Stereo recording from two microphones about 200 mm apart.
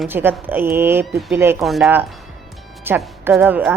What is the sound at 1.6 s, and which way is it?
A woman's voice, centre (ahead or behind).